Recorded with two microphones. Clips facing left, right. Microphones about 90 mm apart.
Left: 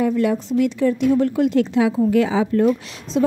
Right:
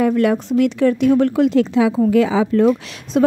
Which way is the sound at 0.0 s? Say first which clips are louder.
Right 3 dB; 70° right (ahead or behind).